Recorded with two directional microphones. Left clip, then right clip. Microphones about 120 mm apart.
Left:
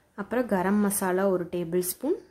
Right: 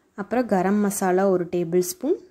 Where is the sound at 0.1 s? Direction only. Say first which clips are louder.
Right 4 dB; 25° right (ahead or behind).